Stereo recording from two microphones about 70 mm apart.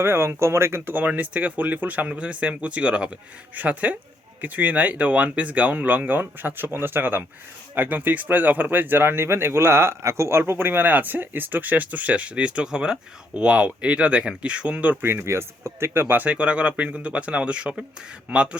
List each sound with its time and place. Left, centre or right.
0.0 s speech: right; by 14.9 s centre
15.0 s speech: right; by 18.4 s centre